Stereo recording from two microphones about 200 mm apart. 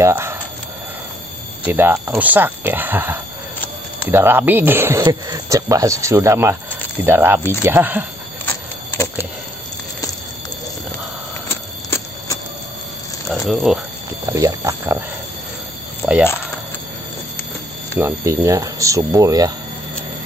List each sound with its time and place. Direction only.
0.0 s clock: 10° right (ahead or behind)
1.7 s speech: 10° right (ahead or behind)
8.5 s keys jangling: 15° left (ahead or behind)
11.4 s alarm clock: 15° left (ahead or behind)
13.5 s speech: centre (ahead or behind)
14.3 s speech: 15° right (ahead or behind)
17.9 s speech: 15° right (ahead or behind)